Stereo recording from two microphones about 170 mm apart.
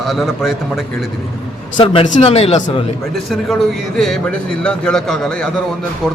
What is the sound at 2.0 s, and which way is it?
Speech, 40° left (ahead or behind).